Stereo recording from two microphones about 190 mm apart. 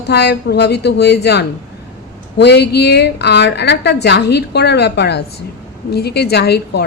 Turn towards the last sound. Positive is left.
turn(degrees=60)  # may be behind; listen again after turning